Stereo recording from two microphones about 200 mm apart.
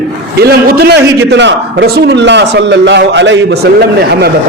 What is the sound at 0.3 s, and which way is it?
A man's voice, 50° right (ahead or behind).